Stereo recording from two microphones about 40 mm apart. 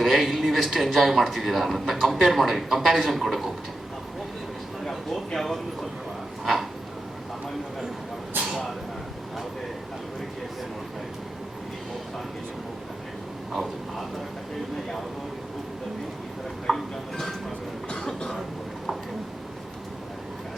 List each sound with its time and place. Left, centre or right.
0.0 s a man's voice: centre
5.3 s speech: centre
6.4 s dog: centre
8.4 s a sound: centre
16.7 s music: centre
17.8 s train: centre